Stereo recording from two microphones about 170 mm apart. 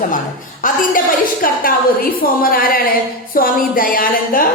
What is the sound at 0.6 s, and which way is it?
A woman's voice, 55° left (ahead or behind).